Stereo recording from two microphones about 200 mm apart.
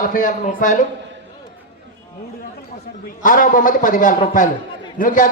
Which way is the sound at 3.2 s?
40° left (ahead or behind).